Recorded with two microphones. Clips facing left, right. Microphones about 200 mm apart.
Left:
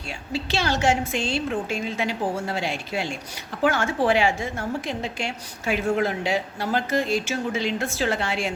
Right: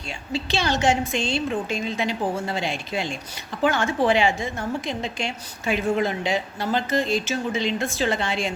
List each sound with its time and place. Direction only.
0.3 s a woman's voice: 10° left (ahead or behind)